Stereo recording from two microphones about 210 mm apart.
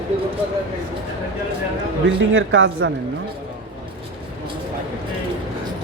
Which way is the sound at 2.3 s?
65° right (ahead or behind).